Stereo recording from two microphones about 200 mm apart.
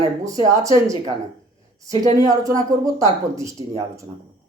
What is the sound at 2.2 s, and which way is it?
Speech, 20° right (ahead or behind).